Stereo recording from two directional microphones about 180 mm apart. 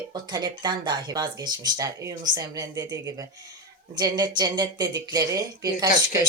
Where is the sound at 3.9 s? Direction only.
20° right (ahead or behind).